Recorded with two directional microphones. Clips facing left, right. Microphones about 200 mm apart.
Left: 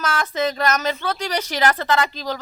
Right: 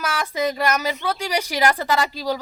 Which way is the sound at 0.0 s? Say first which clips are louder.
Left 1 dB; 10° right (ahead or behind).